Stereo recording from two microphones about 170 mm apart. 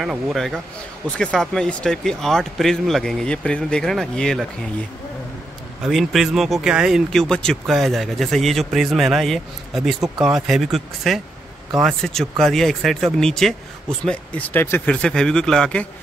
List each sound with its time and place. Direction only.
0.0 s speech: centre (ahead or behind)
5.9 s speech: centre (ahead or behind)